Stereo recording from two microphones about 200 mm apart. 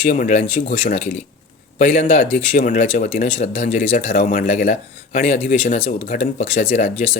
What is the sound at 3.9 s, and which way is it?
Speech, 45° left (ahead or behind).